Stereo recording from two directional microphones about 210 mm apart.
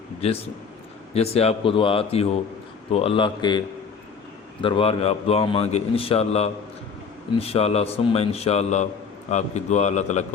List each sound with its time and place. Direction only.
0.2 s speech: 30° left (ahead or behind)
4.6 s a man's voice: 25° left (ahead or behind)